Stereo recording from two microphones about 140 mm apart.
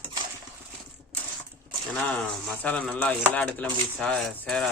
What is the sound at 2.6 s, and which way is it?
Speech, 10° left (ahead or behind).